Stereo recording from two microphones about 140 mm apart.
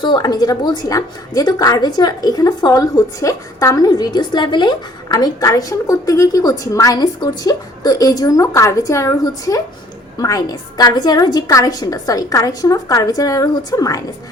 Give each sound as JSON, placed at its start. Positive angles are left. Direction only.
{"t": 0.0, "sound": "a woman's voice", "side_deg": 30}